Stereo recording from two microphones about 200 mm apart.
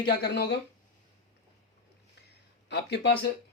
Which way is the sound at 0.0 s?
55° left (ahead or behind).